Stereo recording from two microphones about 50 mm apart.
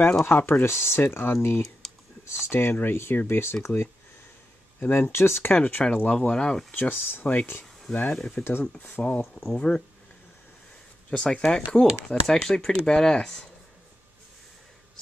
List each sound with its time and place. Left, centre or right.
0.2 s speech: left
1.8 s computer keyboard: centre
2.2 s speech: left
4.7 s speech: left
5.5 s speech: left
6.3 s speech: centre
6.7 s speech: left
8.2 s speech: centre
8.5 s speech: left
9.6 s speech: centre
11.1 s speech: centre